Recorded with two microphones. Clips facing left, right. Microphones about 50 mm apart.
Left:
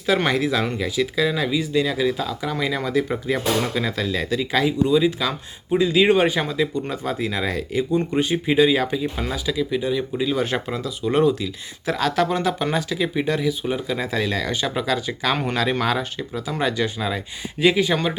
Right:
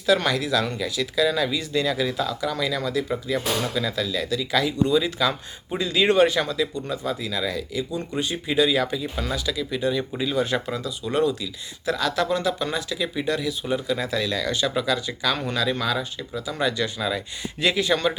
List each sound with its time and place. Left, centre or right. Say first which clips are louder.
0.0 s speech: left 1 dB; left
4.9 s speech: left 2 dB; centre
9.8 s speech: left 2 dB; centre
10.3 s speech: left 1 dB; left
16.6 s speech: left 2 dB; left